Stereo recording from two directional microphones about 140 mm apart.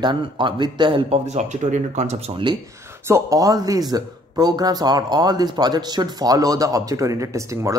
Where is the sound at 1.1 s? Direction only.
55° right (ahead or behind).